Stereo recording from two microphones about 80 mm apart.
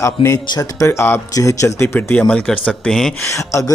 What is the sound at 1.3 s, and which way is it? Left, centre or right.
Speech, left.